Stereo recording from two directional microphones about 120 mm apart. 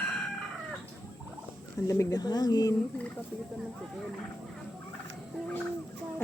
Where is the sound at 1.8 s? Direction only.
30° left (ahead or behind).